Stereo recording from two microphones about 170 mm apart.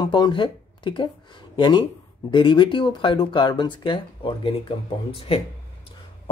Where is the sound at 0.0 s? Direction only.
25° left (ahead or behind).